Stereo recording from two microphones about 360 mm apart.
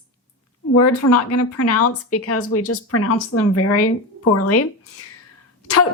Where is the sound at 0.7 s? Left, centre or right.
Left.